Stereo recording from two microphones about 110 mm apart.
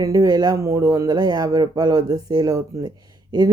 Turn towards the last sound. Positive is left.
turn(degrees=-40)  # may be behind; listen again after turning